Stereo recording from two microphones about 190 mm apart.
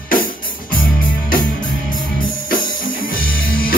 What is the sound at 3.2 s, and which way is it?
Music, 50° left (ahead or behind).